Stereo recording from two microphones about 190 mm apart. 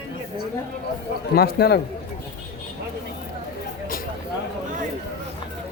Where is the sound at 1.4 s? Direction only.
55° left (ahead or behind).